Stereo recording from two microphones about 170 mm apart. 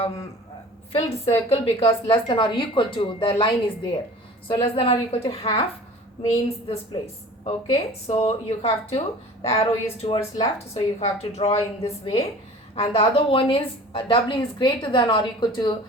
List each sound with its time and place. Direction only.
0.9 s a woman's voice: 35° left (ahead or behind)
7.4 s a woman's voice: 35° left (ahead or behind)
10.2 s a woman's voice: 25° left (ahead or behind)